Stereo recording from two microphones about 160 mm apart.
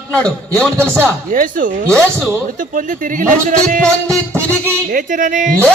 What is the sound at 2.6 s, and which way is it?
A man's voice, 55° right (ahead or behind).